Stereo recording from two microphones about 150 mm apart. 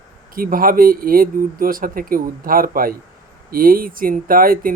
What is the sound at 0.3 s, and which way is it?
Speech, 70° right (ahead or behind).